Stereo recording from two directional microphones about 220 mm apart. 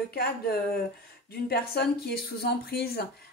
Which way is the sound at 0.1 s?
45° left (ahead or behind).